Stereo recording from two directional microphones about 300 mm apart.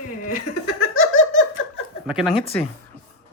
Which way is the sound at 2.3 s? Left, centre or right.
Centre.